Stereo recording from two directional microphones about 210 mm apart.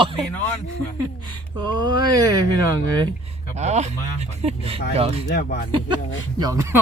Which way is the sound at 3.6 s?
35° right (ahead or behind).